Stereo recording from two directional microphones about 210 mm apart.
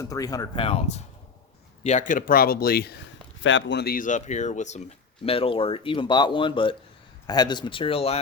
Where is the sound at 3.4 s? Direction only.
60° left (ahead or behind); by 8.2 s 30° left (ahead or behind).